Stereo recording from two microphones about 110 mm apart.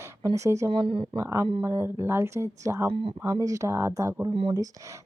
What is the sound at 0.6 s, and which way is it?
Speech, 55° right (ahead or behind).